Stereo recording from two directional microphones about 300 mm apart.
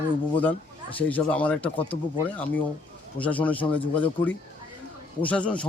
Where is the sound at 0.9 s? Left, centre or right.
Centre.